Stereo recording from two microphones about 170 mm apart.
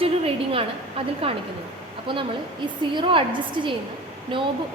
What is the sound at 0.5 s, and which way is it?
A woman's voice, 35° right (ahead or behind).